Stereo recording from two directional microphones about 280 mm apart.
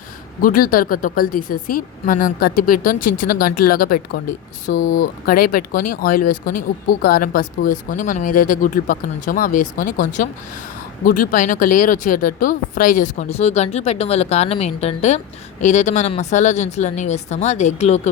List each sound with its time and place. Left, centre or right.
0.4 s speech: left